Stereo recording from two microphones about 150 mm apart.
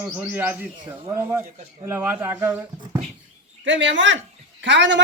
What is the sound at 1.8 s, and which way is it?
Speech, 15° right (ahead or behind).